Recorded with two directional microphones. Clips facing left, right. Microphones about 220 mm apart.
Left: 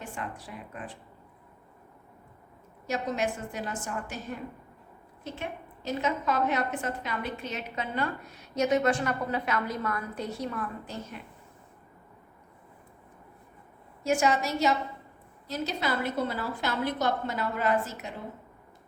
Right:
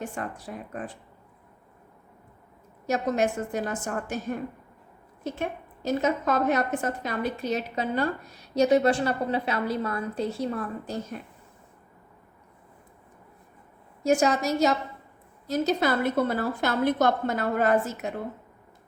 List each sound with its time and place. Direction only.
0.1 s a woman's voice: 45° right (ahead or behind)
2.8 s a woman's voice: 45° right (ahead or behind)
5.2 s a woman's voice: 45° right (ahead or behind)
14.0 s a woman's voice: 40° right (ahead or behind)